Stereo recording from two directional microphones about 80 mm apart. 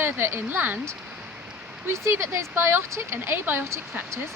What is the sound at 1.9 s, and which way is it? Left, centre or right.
Speech, right.